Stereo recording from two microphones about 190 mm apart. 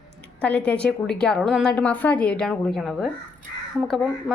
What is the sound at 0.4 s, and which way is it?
A woman's voice, 5° left (ahead or behind).